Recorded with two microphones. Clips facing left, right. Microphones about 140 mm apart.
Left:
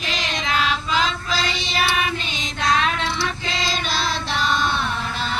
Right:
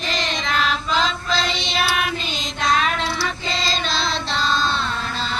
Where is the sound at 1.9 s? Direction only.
Centre (ahead or behind).